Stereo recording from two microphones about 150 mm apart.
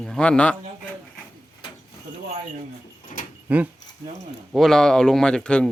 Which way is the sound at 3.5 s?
10° right (ahead or behind).